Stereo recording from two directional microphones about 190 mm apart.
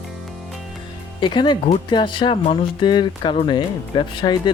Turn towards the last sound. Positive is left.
turn(degrees=25)  # may be behind; listen again after turning